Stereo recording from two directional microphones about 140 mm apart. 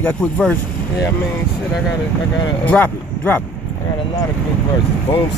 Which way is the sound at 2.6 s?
10° left (ahead or behind).